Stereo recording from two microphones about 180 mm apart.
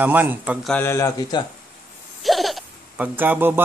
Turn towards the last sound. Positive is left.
turn(degrees=-10)  # may be behind; listen again after turning